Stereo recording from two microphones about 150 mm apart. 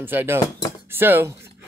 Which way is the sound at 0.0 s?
15° right (ahead or behind).